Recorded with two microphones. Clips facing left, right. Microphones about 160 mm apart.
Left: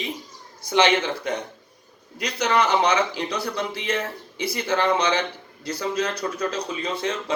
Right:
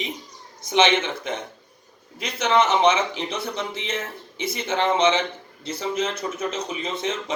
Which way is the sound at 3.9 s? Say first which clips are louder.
Left 4 dB; 65° left (ahead or behind).